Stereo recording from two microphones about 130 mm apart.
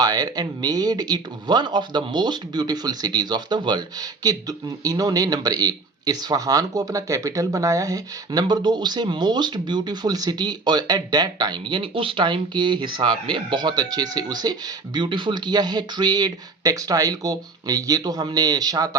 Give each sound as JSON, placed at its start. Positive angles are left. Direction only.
{"t": 0.0, "sound": "speech", "side_deg": -30}